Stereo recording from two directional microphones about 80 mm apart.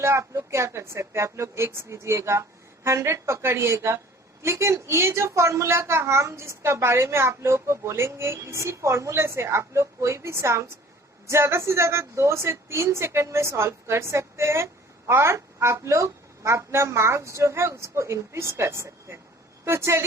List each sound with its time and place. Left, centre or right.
0.0 s a woman's voice: right